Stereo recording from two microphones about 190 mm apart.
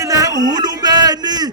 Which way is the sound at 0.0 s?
20° right (ahead or behind).